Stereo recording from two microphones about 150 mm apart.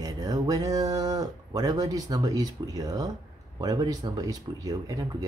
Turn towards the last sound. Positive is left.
turn(degrees=-25)  # may be behind; listen again after turning